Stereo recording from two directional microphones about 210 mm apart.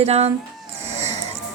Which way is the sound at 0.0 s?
30° right (ahead or behind).